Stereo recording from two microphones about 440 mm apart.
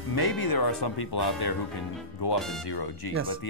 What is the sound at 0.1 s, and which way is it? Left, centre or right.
Speech, left.